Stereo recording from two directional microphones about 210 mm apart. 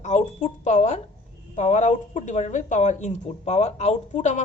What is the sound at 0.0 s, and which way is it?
A woman's voice, 35° left (ahead or behind).